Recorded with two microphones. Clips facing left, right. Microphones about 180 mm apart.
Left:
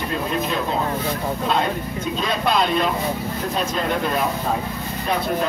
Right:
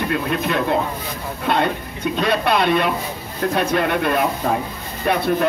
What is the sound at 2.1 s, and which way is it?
Speech, 65° right (ahead or behind).